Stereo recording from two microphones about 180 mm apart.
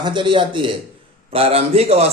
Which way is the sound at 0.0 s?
25° right (ahead or behind).